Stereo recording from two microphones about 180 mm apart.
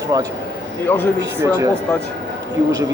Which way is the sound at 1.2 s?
20° right (ahead or behind).